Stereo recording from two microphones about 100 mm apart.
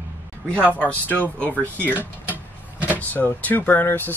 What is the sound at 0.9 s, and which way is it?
Speech, 15° left (ahead or behind).